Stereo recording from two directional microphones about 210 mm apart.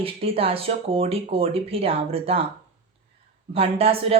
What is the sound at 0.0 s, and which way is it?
Speech, 25° right (ahead or behind).